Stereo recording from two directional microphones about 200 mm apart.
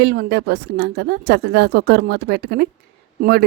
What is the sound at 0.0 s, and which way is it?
A woman's voice, 55° right (ahead or behind).